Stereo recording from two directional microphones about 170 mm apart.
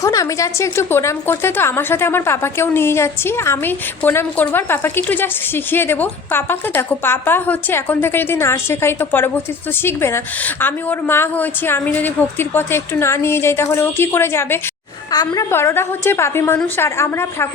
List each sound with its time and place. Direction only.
0.0 s a woman's voice: 20° left (ahead or behind)